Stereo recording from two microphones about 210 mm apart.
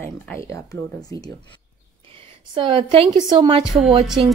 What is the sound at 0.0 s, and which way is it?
Speech, 10° left (ahead or behind).